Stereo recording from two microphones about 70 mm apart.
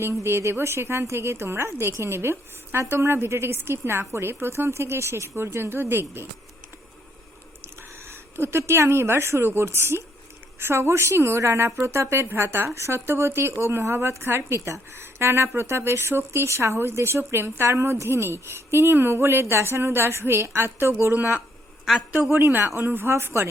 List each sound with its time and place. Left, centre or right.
0.0 s a woman's voice: right
7.6 s a woman's voice: right